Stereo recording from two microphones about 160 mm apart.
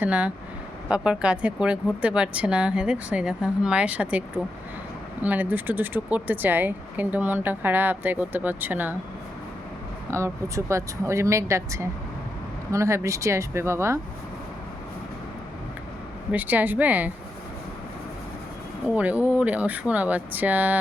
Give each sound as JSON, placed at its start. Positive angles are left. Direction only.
{"t": 0.0, "sound": "a woman's voice", "side_deg": -10}
{"t": 5.2, "sound": "a woman's voice", "side_deg": -10}
{"t": 10.1, "sound": "a woman's voice", "side_deg": -15}
{"t": 16.3, "sound": "a woman's voice", "side_deg": -10}
{"t": 18.9, "sound": "a woman's voice", "side_deg": -10}